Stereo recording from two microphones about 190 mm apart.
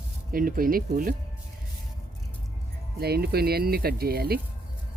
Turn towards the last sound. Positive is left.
turn(degrees=-55)  # may be behind; listen again after turning